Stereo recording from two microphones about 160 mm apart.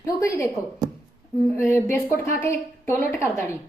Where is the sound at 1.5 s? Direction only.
15° left (ahead or behind).